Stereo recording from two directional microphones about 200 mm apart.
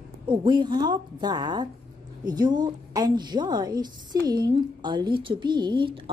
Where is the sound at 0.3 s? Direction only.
25° right (ahead or behind).